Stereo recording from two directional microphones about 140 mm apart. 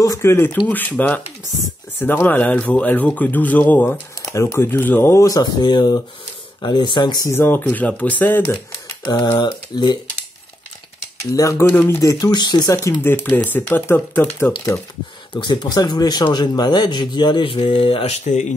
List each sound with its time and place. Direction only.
0.0 s speech: 20° left (ahead or behind)
7.2 s speech: 15° left (ahead or behind)
9.0 s speech: 35° left (ahead or behind)
11.3 s speech: 20° left (ahead or behind)
15.3 s speech: 30° left (ahead or behind); by 18.5 s 55° left (ahead or behind)